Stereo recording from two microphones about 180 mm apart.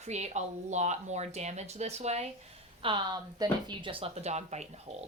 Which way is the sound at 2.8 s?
25° right (ahead or behind).